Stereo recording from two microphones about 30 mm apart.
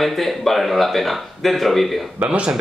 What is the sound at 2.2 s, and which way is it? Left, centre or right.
Speech, right.